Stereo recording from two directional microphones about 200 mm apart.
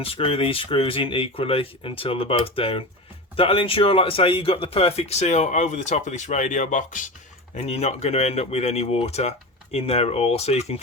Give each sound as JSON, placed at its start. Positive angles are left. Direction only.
{"t": 0.0, "sound": "speech", "side_deg": 30}